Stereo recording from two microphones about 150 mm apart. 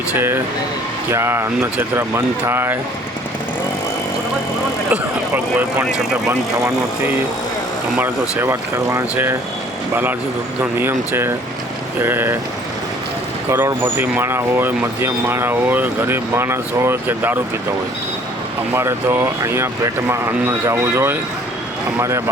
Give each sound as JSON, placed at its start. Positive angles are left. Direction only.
{"t": 0.2, "sound": "speech", "side_deg": -15}
{"t": 4.9, "sound": "speech", "side_deg": -10}
{"t": 13.5, "sound": "speech", "side_deg": -15}
{"t": 18.7, "sound": "speech", "side_deg": -15}